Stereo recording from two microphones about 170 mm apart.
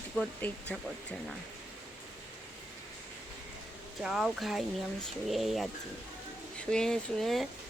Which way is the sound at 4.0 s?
5° right (ahead or behind).